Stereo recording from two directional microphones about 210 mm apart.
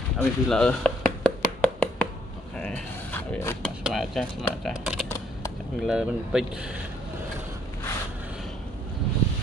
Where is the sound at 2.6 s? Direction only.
5° left (ahead or behind).